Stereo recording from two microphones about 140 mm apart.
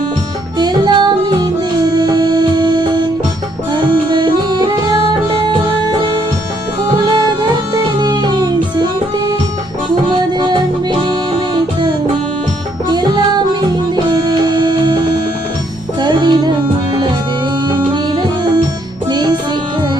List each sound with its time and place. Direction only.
0.6 s music: 30° right (ahead or behind)
7.0 s music: 30° right (ahead or behind)
12.9 s music: 30° right (ahead or behind)
17.9 s music: 35° right (ahead or behind)